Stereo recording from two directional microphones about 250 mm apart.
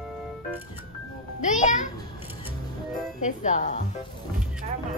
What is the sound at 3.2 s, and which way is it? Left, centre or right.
Speech, left.